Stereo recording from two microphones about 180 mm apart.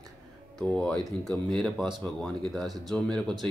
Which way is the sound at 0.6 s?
5° left (ahead or behind).